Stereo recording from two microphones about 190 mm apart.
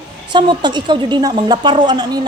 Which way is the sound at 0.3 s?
25° right (ahead or behind).